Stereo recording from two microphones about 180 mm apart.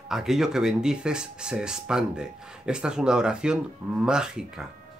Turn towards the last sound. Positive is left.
turn(degrees=-5)  # may be behind; listen again after turning